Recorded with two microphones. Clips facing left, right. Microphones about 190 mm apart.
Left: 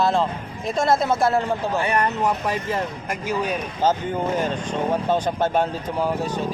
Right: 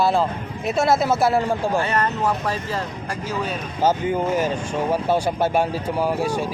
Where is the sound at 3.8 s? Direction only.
10° right (ahead or behind).